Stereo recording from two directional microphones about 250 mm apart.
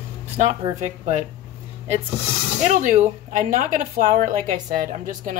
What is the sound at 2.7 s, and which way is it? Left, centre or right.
Speech, right.